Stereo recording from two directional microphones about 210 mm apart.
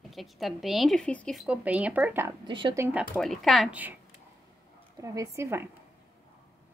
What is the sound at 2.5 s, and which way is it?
Speech, 20° right (ahead or behind).